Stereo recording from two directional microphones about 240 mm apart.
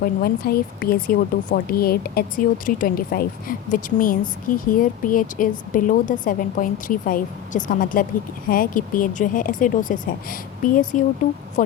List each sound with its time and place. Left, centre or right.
0.0 s speech: left